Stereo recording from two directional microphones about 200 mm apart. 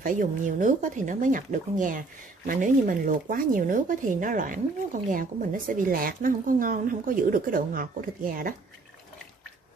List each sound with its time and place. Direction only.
0.0 s speech: 40° right (ahead or behind)